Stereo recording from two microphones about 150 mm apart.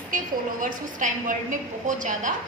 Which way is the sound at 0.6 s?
60° right (ahead or behind).